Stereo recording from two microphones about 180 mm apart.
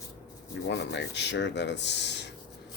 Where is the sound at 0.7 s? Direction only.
75° left (ahead or behind).